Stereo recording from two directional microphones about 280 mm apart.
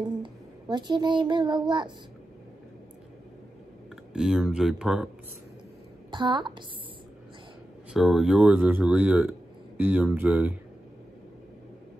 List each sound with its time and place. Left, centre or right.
0.2 s a child's voice: centre
4.1 s speech: centre
6.0 s a woman's voice: centre
7.9 s speech: centre